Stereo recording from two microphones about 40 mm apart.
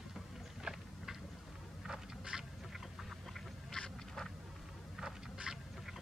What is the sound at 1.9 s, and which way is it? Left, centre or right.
Boat, centre.